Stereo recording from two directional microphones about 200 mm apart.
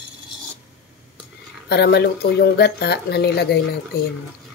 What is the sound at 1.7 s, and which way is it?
Speech, 55° left (ahead or behind).